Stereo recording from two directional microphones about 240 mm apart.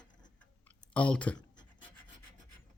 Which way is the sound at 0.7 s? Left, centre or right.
Centre.